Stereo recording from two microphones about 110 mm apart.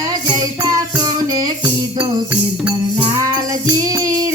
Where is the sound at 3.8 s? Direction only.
35° right (ahead or behind).